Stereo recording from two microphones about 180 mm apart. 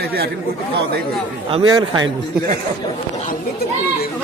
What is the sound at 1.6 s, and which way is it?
Speech, 20° right (ahead or behind).